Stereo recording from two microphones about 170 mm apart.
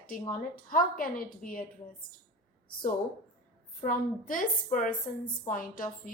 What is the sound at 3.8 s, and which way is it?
A woman's voice, 50° left (ahead or behind).